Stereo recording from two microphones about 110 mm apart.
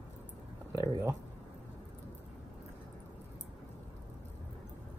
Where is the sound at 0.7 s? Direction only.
30° right (ahead or behind).